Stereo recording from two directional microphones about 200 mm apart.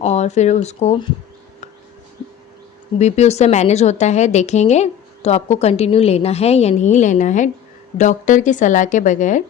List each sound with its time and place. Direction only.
0.0 s a woman's voice: 35° left (ahead or behind)
3.0 s a woman's voice: 35° left (ahead or behind)